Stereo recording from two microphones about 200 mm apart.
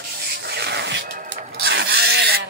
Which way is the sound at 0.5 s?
55° right (ahead or behind).